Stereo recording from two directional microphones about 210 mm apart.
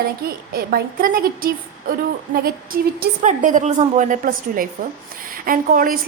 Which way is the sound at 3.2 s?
35° right (ahead or behind).